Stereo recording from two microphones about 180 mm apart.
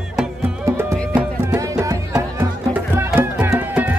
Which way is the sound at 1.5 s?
20° right (ahead or behind).